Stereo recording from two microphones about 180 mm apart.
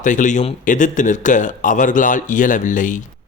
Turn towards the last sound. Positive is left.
turn(degrees=45)  # may be behind; listen again after turning